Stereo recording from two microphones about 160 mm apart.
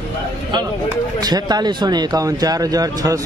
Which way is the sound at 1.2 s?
25° right (ahead or behind).